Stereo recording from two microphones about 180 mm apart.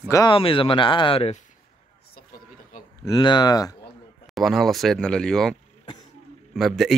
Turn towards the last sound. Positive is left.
turn(degrees=0)  # may be behind; listen again after turning